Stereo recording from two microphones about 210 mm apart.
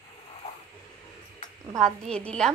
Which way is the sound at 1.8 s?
5° left (ahead or behind).